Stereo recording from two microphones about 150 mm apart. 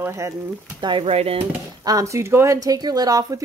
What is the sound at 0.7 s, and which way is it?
Speech, 30° right (ahead or behind).